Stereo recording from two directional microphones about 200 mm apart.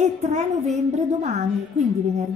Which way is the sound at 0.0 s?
35° right (ahead or behind).